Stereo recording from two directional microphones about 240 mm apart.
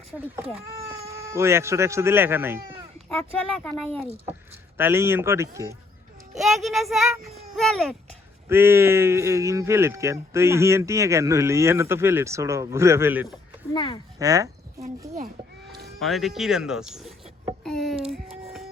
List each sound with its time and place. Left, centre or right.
0.1 s speech: centre
3.2 s speech: centre
4.8 s speech: centre
6.3 s speech: centre
8.4 s speech: centre
13.7 s speech: left
14.2 s speech: centre
16.0 s speech: centre
17.6 s a sound: centre